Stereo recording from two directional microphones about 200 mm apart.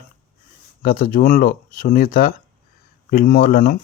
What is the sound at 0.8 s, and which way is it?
Speech, 45° left (ahead or behind).